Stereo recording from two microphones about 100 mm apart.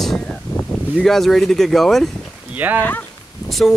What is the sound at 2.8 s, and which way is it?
Speech, 15° left (ahead or behind).